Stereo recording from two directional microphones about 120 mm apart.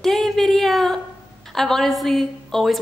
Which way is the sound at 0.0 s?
Centre (ahead or behind).